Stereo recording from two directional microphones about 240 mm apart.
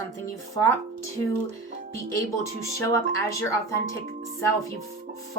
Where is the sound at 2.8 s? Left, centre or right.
Centre.